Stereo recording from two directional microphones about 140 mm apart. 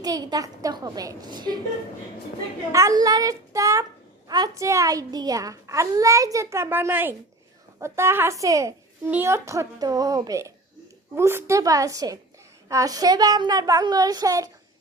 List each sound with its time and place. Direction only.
0.0 s a child's voice: 25° right (ahead or behind)
2.7 s a child's voice: 25° right (ahead or behind)